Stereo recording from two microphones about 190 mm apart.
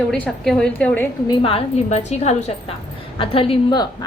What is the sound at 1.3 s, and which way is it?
A woman's voice, 30° left (ahead or behind).